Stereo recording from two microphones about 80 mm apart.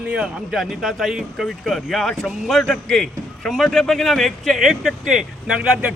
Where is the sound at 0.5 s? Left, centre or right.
Centre.